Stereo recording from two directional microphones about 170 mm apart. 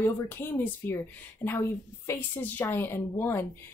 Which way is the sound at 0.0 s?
15° left (ahead or behind).